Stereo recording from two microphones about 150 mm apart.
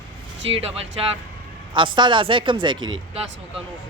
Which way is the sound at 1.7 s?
30° right (ahead or behind).